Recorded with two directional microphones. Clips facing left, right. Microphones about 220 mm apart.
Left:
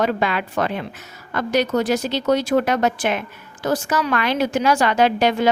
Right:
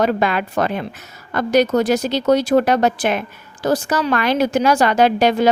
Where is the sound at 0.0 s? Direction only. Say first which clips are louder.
Right 3 dB; 45° right (ahead or behind).